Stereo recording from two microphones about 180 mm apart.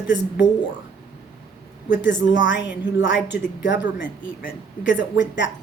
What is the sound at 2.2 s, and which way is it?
A woman's voice, 90° left.